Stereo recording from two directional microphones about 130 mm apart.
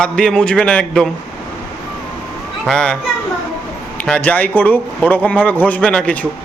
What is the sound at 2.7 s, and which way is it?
Speech, 5° left (ahead or behind).